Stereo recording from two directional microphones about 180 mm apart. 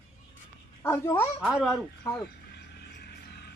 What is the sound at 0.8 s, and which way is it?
Speech, 10° left (ahead or behind).